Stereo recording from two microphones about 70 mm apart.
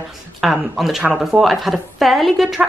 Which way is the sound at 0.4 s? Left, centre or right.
Centre.